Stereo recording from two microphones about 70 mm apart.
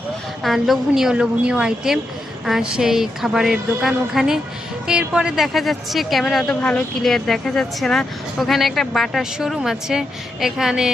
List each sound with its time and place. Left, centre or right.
0.4 s a woman's voice: centre
5.4 s speech: centre
6.5 s speech: centre
7.0 s a woman's voice: centre